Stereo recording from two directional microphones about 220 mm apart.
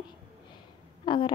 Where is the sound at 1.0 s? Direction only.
20° left (ahead or behind).